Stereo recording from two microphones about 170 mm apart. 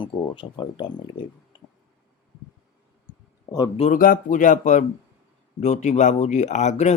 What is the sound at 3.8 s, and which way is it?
Speech, 55° left (ahead or behind).